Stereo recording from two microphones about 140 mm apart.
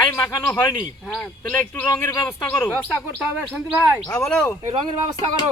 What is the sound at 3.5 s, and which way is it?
Speech, 10° right (ahead or behind).